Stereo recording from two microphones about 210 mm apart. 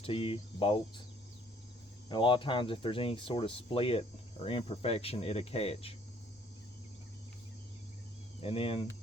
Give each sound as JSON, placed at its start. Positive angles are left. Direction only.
{"t": 0.0, "sound": "speech", "side_deg": 25}
{"t": 2.0, "sound": "speech", "side_deg": 20}
{"t": 8.4, "sound": "speech", "side_deg": 25}